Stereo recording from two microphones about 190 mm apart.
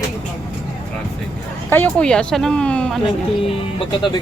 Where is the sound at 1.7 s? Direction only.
5° left (ahead or behind).